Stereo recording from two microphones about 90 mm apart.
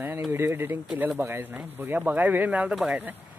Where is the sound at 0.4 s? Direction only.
25° right (ahead or behind).